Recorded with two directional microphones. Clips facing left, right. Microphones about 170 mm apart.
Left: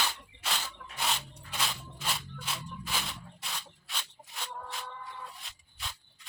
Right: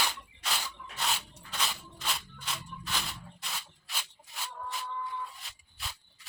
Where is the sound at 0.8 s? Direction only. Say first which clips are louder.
Right 1 dB; 60° left (ahead or behind).